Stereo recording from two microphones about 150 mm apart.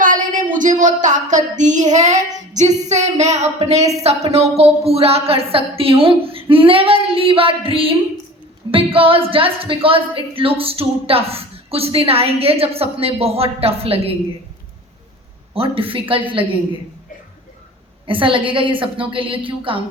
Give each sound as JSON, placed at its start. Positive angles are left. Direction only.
{"t": 0.0, "sound": "a sound", "side_deg": -60}
{"t": 4.0, "sound": "a woman's voice", "side_deg": -45}
{"t": 15.5, "sound": "a woman's voice", "side_deg": -40}
{"t": 18.0, "sound": "a woman's voice", "side_deg": -35}